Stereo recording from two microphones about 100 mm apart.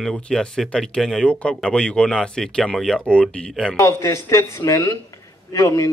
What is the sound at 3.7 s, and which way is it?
A man's voice, 30° left (ahead or behind).